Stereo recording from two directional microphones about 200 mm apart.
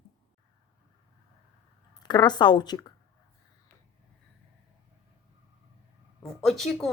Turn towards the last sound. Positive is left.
turn(degrees=0)  # may be behind; listen again after turning